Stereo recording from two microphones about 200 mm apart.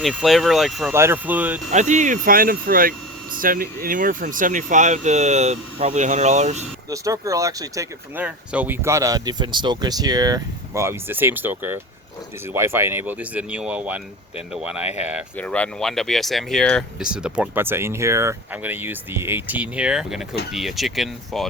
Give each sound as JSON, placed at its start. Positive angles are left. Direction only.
{"t": 0.0, "sound": "speech", "side_deg": 0}
{"t": 0.9, "sound": "speech", "side_deg": -10}
{"t": 1.7, "sound": "speech", "side_deg": -35}
{"t": 6.9, "sound": "speech", "side_deg": -15}
{"t": 15.4, "sound": "speech", "side_deg": 5}